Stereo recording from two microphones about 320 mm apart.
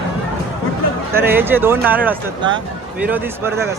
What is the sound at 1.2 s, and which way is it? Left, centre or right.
Speech, centre.